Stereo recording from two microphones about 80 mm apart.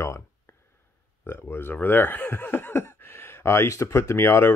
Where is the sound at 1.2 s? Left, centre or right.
Left.